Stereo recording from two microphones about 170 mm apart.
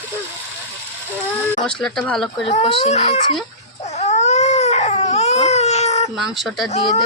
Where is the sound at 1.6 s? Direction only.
5° left (ahead or behind).